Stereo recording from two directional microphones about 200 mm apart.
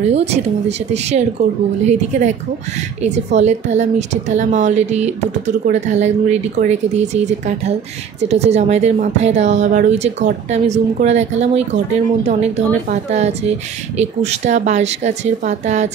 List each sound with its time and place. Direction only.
0.1 s speech: 30° right (ahead or behind)